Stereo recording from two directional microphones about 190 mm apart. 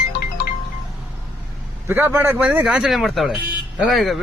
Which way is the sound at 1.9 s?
10° right (ahead or behind).